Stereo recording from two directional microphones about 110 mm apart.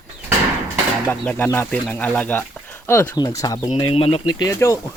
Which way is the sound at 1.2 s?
15° left (ahead or behind).